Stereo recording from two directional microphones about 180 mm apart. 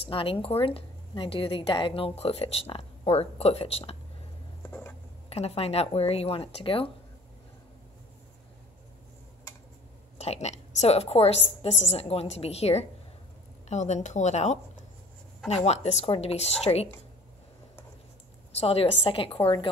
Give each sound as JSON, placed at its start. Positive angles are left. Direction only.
{"t": 0.1, "sound": "a woman's voice", "side_deg": 30}
{"t": 4.6, "sound": "a sound", "side_deg": 10}
{"t": 5.3, "sound": "a woman's voice", "side_deg": 35}
{"t": 10.1, "sound": "a woman's voice", "side_deg": 35}
{"t": 18.6, "sound": "a woman's voice", "side_deg": 35}